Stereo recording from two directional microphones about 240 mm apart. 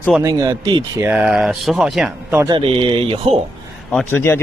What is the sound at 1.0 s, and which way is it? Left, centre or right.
Speech, centre.